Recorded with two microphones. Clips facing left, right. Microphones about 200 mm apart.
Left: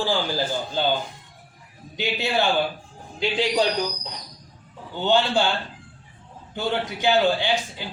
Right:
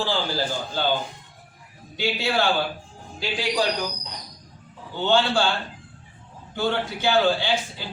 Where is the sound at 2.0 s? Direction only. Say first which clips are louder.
Even; 20° left (ahead or behind).